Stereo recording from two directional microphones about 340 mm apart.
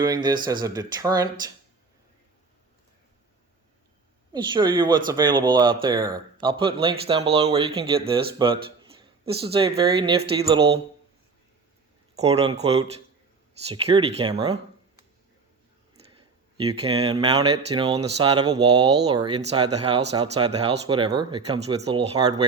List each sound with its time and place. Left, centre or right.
0.0 s speech: centre
4.3 s speech: centre
12.1 s speech: centre
14.4 s a sound: centre
16.6 s speech: centre